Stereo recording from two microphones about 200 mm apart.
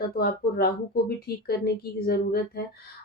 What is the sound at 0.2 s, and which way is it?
Speech, 50° left (ahead or behind).